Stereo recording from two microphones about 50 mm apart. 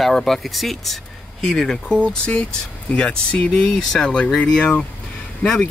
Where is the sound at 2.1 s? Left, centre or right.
Centre.